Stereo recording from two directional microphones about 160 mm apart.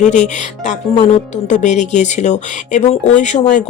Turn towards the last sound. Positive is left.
turn(degrees=50)  # may be behind; listen again after turning